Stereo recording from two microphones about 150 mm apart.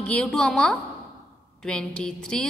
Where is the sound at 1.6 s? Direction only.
5° left (ahead or behind).